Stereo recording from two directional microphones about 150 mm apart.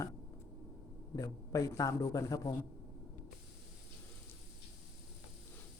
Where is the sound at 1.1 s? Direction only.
20° left (ahead or behind).